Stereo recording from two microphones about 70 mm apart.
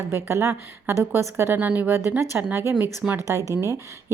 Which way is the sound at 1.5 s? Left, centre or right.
Right.